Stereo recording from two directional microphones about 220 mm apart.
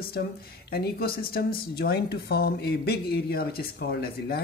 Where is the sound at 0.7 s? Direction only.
45° left (ahead or behind).